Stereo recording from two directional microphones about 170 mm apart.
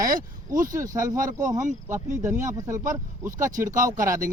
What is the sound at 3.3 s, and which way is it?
Speech, 50° right (ahead or behind).